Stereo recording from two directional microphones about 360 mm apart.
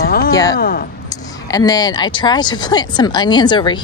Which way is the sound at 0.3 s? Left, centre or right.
Centre.